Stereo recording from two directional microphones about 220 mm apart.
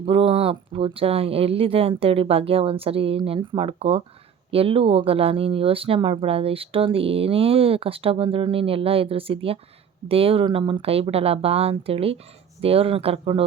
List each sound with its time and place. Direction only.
0.0 s speech: 25° right (ahead or behind)